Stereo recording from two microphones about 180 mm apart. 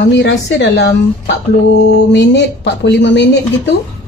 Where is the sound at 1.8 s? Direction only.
70° left (ahead or behind).